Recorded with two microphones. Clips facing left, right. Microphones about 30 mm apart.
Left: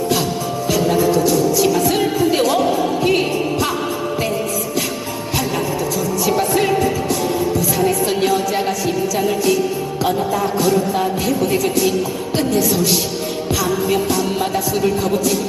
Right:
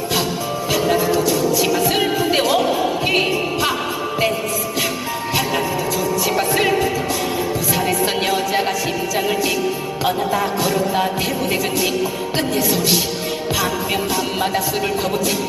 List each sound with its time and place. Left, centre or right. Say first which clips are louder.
0.7 s music: left 2 dB; centre
6.2 s music: left 2 dB; centre